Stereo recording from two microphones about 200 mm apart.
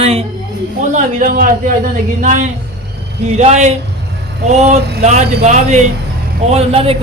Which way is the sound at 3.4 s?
35° right (ahead or behind).